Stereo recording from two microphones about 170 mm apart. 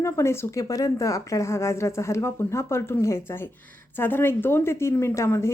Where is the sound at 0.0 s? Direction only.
15° left (ahead or behind).